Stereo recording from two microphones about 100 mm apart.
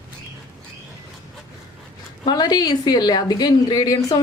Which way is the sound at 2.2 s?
45° left (ahead or behind).